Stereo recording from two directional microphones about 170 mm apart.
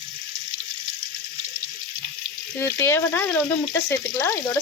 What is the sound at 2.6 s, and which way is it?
Speech, 15° left (ahead or behind).